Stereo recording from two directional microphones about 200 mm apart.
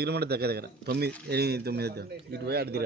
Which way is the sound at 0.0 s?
55° right (ahead or behind).